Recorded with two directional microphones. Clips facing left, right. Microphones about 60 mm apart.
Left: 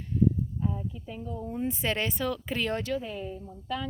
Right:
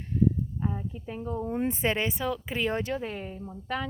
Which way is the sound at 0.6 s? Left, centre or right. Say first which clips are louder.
Even; right.